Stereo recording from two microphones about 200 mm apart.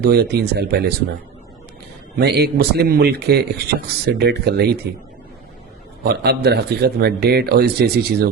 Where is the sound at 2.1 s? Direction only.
55° right (ahead or behind).